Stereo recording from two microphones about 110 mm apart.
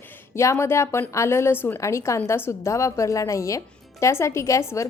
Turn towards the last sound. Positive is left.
turn(degrees=25)  # may be behind; listen again after turning